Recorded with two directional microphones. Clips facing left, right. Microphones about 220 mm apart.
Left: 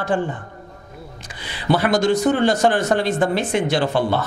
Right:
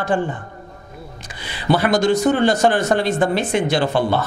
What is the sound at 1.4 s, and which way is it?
Speech, 15° right (ahead or behind).